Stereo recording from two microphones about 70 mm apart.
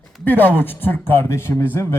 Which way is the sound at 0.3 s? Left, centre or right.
Left.